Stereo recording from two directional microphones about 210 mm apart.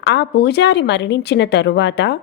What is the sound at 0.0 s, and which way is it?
Speech, 55° left (ahead or behind).